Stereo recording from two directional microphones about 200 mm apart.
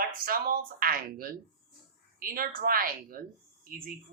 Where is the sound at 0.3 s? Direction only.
45° right (ahead or behind).